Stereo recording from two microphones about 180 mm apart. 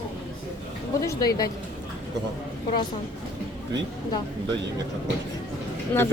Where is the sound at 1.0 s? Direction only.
20° left (ahead or behind).